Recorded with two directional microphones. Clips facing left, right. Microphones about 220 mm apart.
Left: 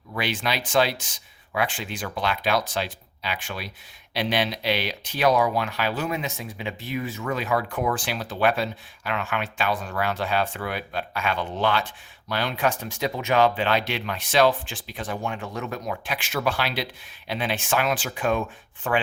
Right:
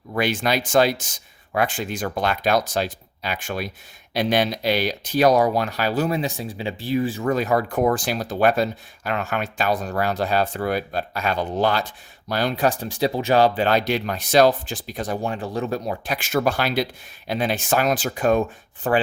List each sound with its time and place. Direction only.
0.1 s speech: 45° right (ahead or behind)